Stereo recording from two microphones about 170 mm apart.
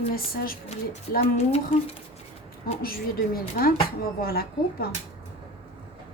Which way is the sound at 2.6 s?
60° left (ahead or behind).